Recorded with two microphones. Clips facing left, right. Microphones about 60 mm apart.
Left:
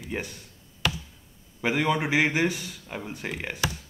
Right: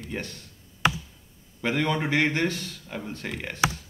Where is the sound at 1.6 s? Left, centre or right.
Centre.